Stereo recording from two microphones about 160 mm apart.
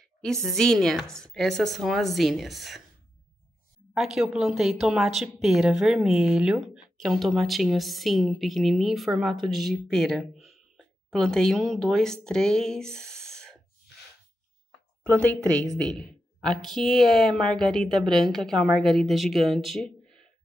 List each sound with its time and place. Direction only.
0.2 s speech: 5° left (ahead or behind)
3.9 s speech: centre (ahead or behind)
15.5 s a woman's voice: 20° right (ahead or behind)
15.8 s speech: 5° left (ahead or behind)